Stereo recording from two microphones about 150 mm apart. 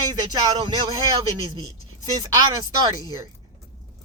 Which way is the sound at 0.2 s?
30° right (ahead or behind).